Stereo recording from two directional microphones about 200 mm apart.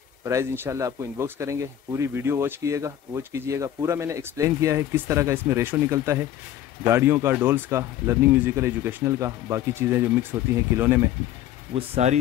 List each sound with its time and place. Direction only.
0.2 s speech: 15° right (ahead or behind)
11.7 s speech: 30° right (ahead or behind)